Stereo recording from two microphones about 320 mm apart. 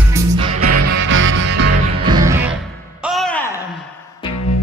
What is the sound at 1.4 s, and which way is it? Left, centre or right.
Music, right.